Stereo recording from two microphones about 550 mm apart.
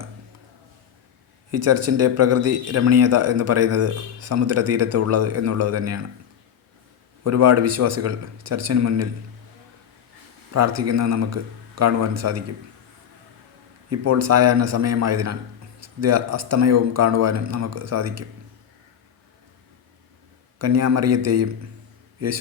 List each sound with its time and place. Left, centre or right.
1.5 s speech: right
7.3 s speech: right
10.8 s speech: right
13.9 s speech: right
20.6 s speech: right